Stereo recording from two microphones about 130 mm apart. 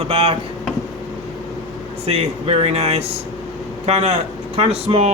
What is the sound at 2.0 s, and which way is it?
A man's voice, 50° right (ahead or behind).